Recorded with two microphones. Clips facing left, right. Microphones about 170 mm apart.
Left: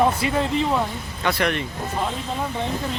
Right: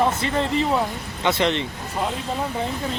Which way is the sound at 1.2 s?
20° right (ahead or behind).